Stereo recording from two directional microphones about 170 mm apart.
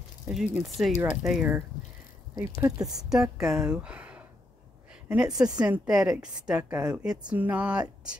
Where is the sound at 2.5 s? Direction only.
20° right (ahead or behind).